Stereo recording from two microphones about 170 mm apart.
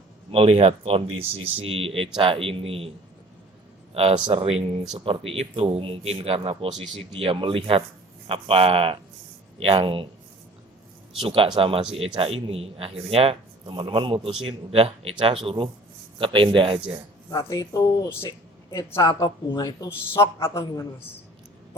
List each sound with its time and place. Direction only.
0.3 s a man's voice: 35° right (ahead or behind)
3.9 s a man's voice: 35° right (ahead or behind)
11.2 s a man's voice: 35° right (ahead or behind)
17.3 s a woman's voice: 20° left (ahead or behind)